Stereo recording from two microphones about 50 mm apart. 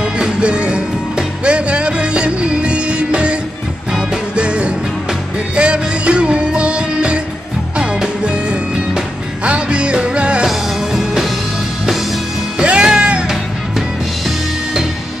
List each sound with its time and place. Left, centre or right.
0.0 s music: centre
10.4 s music: centre
12.5 s music: centre